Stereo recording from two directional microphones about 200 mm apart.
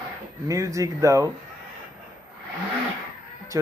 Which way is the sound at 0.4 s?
15° right (ahead or behind).